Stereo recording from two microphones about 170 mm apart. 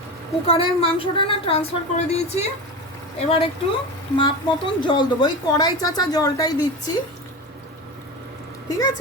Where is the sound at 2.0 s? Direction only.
40° left (ahead or behind).